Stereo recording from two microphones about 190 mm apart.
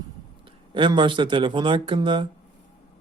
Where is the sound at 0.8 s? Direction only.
25° right (ahead or behind).